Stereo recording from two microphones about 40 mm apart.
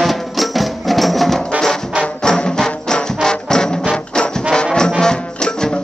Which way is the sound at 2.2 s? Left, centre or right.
Centre.